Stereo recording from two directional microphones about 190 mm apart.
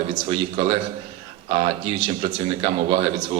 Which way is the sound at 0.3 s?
25° right (ahead or behind).